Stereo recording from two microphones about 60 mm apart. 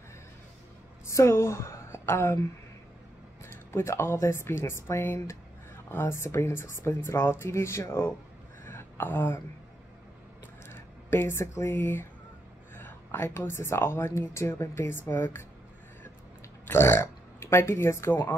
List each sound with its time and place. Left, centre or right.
1.0 s a woman's voice: left
3.4 s a woman's voice: left
8.6 s a sound: left
10.7 s a sound: left
11.7 s a woman's voice: left
16.6 s speech: left